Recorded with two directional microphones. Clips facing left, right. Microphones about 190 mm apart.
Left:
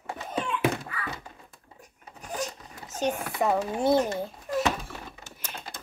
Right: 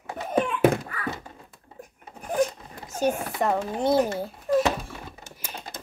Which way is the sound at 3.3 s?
5° left (ahead or behind).